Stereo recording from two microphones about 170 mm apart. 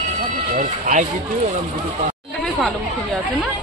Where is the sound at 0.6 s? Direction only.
45° right (ahead or behind).